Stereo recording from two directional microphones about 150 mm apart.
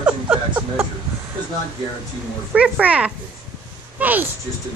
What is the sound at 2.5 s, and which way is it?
Speech, 10° right (ahead or behind).